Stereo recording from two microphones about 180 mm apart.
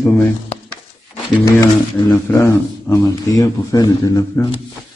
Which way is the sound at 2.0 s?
20° left (ahead or behind).